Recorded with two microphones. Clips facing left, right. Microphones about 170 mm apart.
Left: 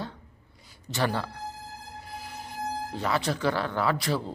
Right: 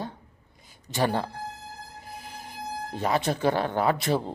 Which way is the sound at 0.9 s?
15° right (ahead or behind).